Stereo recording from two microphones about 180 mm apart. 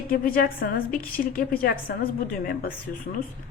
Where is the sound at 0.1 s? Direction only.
55° left (ahead or behind).